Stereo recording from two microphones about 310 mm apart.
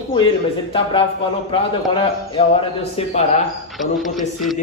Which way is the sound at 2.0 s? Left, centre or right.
Centre.